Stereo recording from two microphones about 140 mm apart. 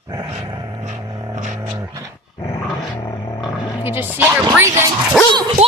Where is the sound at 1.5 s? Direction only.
20° right (ahead or behind).